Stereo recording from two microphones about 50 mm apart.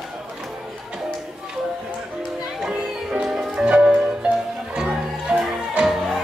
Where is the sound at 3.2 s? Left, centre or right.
Centre.